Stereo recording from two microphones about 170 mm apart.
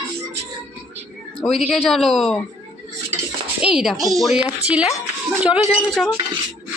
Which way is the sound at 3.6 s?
5° right (ahead or behind).